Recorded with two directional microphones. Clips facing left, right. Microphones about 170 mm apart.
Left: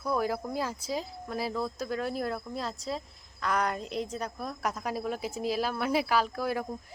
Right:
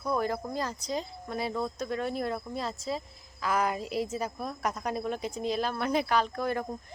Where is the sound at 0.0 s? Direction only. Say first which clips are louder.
Even; 5° left (ahead or behind).